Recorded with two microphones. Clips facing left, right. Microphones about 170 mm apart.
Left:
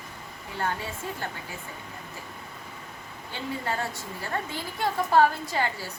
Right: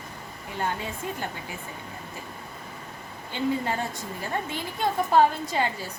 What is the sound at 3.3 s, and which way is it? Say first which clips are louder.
A woman's voice: right 5 dB; 15° right (ahead or behind).